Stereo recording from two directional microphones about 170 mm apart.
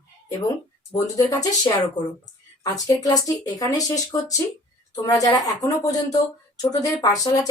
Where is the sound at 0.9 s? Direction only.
20° left (ahead or behind).